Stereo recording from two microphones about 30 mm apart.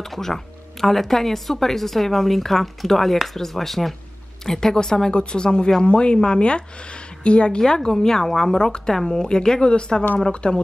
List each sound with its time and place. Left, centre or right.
0.0 s speech: centre
4.5 s a woman's voice: centre; by 7.6 s left
7.6 s a woman's voice: left